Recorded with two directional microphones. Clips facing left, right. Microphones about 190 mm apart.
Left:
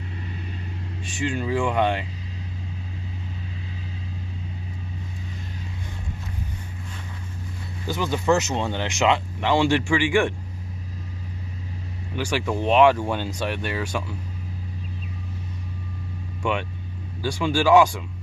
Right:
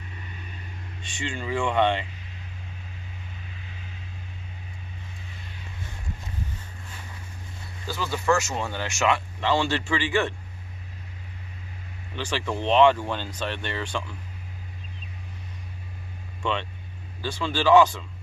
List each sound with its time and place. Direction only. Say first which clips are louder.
0.2 s vehicle: left 7 dB; 30° left (ahead or behind)
1.2 s speech: left 4 dB; 5° left (ahead or behind)
7.9 s speech: left 3 dB; 20° left (ahead or behind)
12.1 s speech: left 4 dB; 10° left (ahead or behind)
16.4 s speech: left 3 dB; 10° left (ahead or behind)